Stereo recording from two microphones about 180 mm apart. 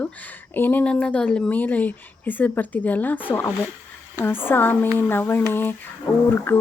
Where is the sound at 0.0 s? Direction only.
10° left (ahead or behind).